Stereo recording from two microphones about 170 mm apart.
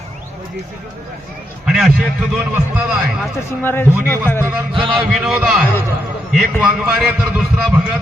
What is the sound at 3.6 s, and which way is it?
Speech, 15° left (ahead or behind).